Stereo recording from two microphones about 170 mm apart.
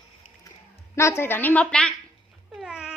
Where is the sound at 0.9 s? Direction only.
15° left (ahead or behind).